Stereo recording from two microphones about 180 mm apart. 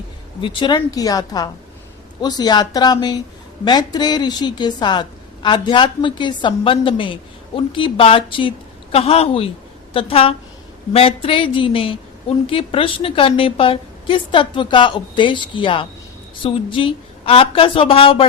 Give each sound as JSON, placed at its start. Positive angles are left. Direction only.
{"t": 0.4, "sound": "a woman's voice", "side_deg": 25}